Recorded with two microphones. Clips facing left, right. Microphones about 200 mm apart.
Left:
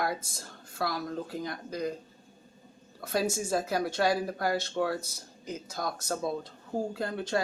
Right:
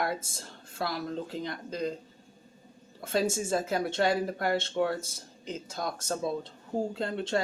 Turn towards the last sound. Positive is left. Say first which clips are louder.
# right 1 dB
turn(degrees=-25)  # may be behind; listen again after turning